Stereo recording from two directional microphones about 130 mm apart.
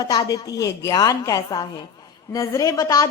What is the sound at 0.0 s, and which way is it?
Speech, 30° left (ahead or behind).